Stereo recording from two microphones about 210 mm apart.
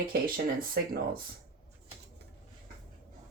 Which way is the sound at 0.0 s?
45° right (ahead or behind).